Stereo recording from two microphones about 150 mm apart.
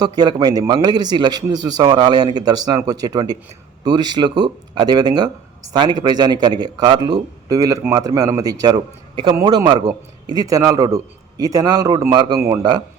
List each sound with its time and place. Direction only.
0.0 s speech: 25° right (ahead or behind)